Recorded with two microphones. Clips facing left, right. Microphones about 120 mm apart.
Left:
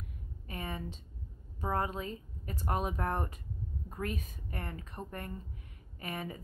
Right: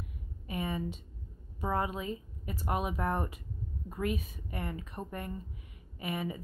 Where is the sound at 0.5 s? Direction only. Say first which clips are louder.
Right 5 dB; 15° right (ahead or behind).